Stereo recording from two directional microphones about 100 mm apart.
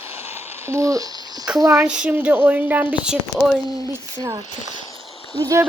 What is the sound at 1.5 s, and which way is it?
Speech, 35° right (ahead or behind).